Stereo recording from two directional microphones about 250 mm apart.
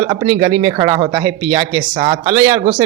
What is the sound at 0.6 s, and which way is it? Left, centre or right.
Speech, centre.